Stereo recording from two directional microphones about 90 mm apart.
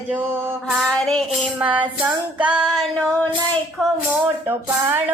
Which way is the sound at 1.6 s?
65° right (ahead or behind).